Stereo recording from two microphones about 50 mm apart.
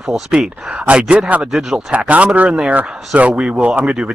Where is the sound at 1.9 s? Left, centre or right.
Right.